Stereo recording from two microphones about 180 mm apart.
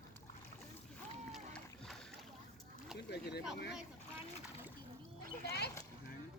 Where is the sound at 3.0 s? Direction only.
65° left (ahead or behind).